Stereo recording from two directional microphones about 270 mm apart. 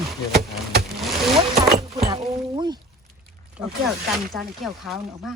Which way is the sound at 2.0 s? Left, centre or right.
Centre.